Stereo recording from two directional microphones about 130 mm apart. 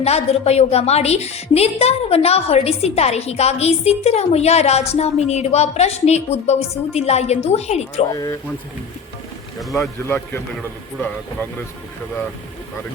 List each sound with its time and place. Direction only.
0.0 s a woman's voice: 55° left (ahead or behind)
8.1 s speech: 25° left (ahead or behind)
9.6 s speech: centre (ahead or behind)